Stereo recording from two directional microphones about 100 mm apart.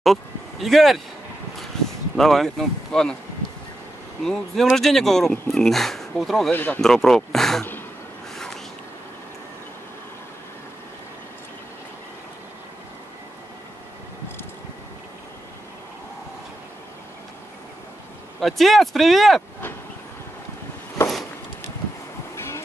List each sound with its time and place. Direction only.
0.0 s a sound: centre (ahead or behind)
2.1 s speech: 5° left (ahead or behind)
4.2 s speech: 5° left (ahead or behind)
6.5 s speech: 20° left (ahead or behind)
6.8 s speech: 5° left (ahead or behind)
18.4 s speech: centre (ahead or behind)
22.3 s vehicle: 30° left (ahead or behind)